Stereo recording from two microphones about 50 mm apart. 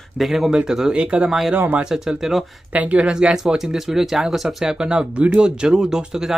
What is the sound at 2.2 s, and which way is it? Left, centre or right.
Speech, centre.